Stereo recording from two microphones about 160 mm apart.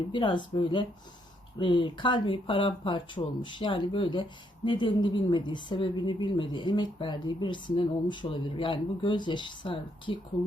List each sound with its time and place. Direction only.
0.1 s speech: 30° left (ahead or behind)